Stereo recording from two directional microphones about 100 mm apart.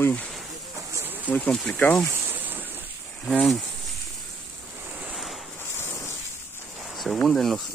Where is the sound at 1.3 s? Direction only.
5° left (ahead or behind).